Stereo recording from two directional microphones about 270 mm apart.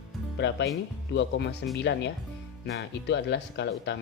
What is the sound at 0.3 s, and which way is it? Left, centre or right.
Speech, left.